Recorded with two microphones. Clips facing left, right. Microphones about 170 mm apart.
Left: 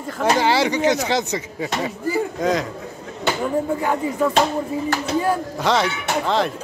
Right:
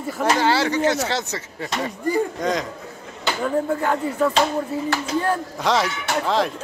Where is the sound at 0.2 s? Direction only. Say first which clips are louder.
Left 2 dB; 15° left (ahead or behind).